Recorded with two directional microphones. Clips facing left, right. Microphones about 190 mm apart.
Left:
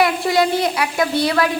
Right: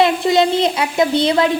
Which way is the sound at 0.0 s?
20° right (ahead or behind).